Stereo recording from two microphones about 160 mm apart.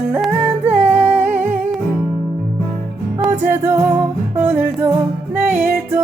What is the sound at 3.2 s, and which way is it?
Music, 15° right (ahead or behind).